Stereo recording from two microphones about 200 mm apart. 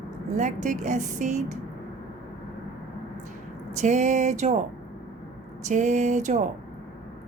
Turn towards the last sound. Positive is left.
turn(degrees=-35)  # may be behind; listen again after turning